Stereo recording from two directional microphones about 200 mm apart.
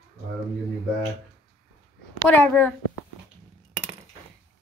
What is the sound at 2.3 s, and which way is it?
Speech, 10° left (ahead or behind).